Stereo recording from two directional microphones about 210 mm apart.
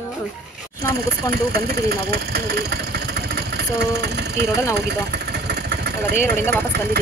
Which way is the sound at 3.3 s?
50° right (ahead or behind).